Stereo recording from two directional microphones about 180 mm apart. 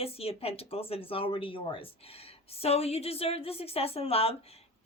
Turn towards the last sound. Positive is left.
turn(degrees=35)  # may be behind; listen again after turning